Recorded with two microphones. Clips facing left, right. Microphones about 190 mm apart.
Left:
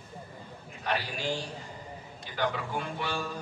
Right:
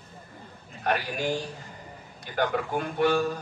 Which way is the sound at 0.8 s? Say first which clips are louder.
Right 4 dB; 50° right (ahead or behind).